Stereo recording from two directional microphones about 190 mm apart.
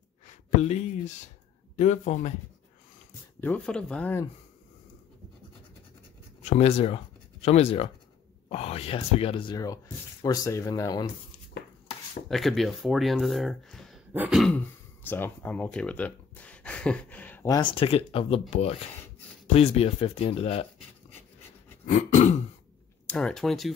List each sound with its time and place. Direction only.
0.3 s speech: 35° left (ahead or behind)
3.3 s speech: 10° left (ahead or behind)
6.5 s speech: 35° left (ahead or behind)
12.3 s speech: centre (ahead or behind)
15.0 s speech: 10° left (ahead or behind)
17.6 s speech: 30° left (ahead or behind)
21.8 s speech: 40° left (ahead or behind)
23.0 s speech: 5° left (ahead or behind)